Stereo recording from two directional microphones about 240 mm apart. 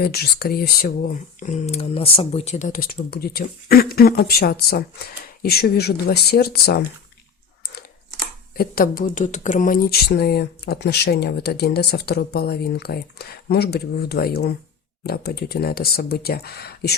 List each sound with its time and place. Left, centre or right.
0.0 s speech: left
8.5 s speech: left